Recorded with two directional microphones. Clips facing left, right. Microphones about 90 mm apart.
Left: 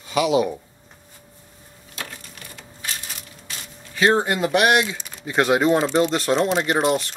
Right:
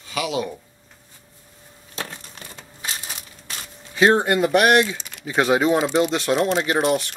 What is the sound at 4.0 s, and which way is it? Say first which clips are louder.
Speech: right 2 dB; centre (ahead or behind).